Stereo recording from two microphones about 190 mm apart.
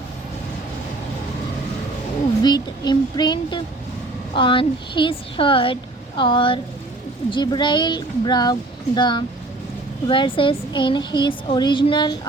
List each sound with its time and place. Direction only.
2.4 s a woman's voice: 20° left (ahead or behind)